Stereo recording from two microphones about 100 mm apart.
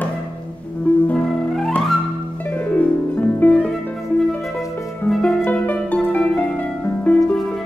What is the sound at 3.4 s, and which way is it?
Music, 15° left (ahead or behind).